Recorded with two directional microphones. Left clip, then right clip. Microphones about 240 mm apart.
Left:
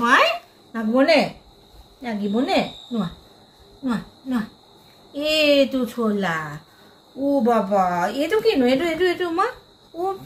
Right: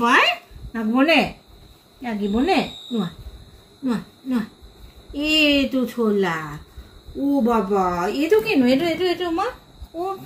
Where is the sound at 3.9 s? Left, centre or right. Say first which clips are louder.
Right 1 dB; centre.